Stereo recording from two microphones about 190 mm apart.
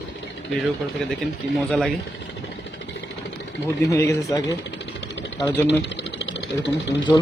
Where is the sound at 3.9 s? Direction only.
15° left (ahead or behind).